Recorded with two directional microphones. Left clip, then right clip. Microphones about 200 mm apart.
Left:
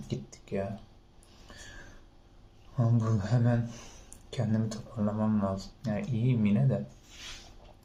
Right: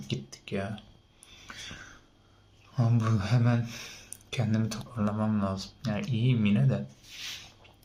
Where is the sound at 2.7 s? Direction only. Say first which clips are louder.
Right 1 dB; 10° right (ahead or behind).